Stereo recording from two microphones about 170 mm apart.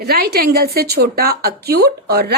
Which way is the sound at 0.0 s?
65° right (ahead or behind).